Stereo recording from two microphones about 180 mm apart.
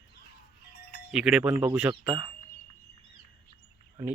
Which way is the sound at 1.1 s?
5° right (ahead or behind).